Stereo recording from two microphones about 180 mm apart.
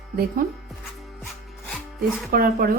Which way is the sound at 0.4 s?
50° right (ahead or behind).